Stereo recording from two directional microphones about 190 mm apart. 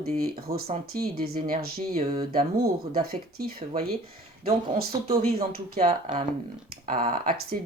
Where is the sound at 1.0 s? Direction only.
50° right (ahead or behind).